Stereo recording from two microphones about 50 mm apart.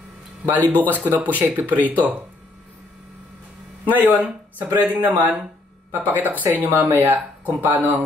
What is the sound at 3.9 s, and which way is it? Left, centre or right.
Speech, right.